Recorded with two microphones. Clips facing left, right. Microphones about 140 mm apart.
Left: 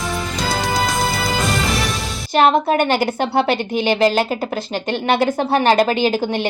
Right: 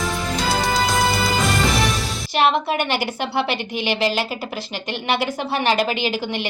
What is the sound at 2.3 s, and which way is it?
A woman's voice, 50° left (ahead or behind).